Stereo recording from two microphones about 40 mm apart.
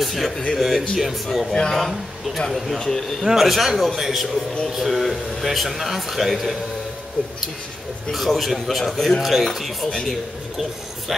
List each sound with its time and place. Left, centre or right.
0.0 s speech: centre
1.5 s a man's voice: centre
2.8 s a man's voice: centre
3.3 s speech: centre
8.1 s speech: centre